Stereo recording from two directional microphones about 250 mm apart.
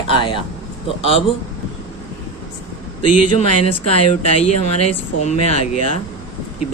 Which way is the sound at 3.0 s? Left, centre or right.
Left.